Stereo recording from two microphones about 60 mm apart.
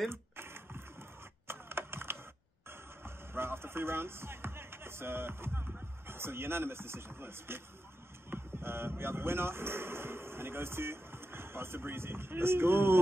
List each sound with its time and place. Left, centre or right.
0.1 s a sound: right
1.5 s typing: right
3.0 s a man's voice: right